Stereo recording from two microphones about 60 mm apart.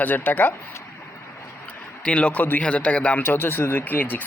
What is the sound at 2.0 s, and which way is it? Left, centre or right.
A man's voice, centre.